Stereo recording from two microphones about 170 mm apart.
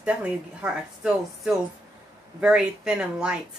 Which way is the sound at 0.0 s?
5° right (ahead or behind).